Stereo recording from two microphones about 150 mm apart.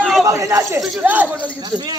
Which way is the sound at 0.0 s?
Centre (ahead or behind).